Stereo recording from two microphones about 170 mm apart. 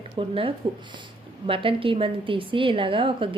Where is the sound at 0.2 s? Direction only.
30° right (ahead or behind).